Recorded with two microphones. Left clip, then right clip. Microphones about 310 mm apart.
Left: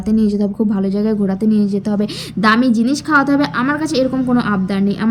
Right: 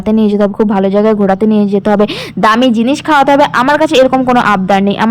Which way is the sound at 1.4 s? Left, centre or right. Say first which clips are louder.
Right 7 dB; centre.